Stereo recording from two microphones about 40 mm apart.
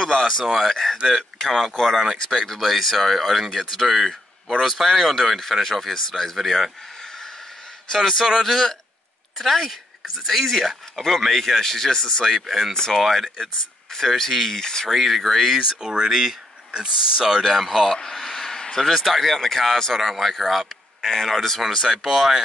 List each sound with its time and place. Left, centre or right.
0.0 s a man's voice: centre
0.5 s speech: centre
1.4 s speech: centre
12.4 s speech: centre
12.7 s speech: centre
13.0 s speech: centre
14.9 s speech: centre
15.8 s speech: centre
18.3 s a sound: centre
18.8 s speech: centre
21.8 s speech: centre